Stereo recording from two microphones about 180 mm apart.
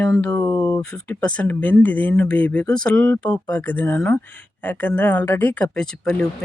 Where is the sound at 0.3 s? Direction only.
15° left (ahead or behind).